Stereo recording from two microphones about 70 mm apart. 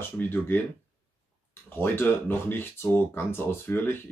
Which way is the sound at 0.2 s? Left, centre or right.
Left.